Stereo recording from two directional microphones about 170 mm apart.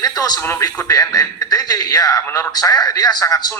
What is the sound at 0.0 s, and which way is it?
Speech, 20° left (ahead or behind).